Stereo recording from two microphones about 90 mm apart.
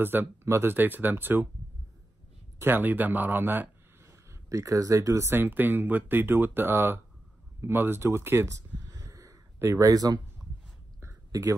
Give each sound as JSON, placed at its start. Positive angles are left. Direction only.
{"t": 0.0, "sound": "speech", "side_deg": -25}
{"t": 2.6, "sound": "speech", "side_deg": -20}